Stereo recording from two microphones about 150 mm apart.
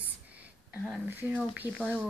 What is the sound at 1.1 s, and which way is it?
Speech, 15° right (ahead or behind).